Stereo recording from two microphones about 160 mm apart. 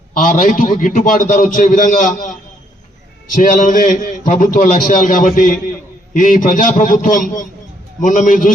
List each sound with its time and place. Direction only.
0.1 s a man's voice: 60° left (ahead or behind)
3.3 s a man's voice: 55° left (ahead or behind)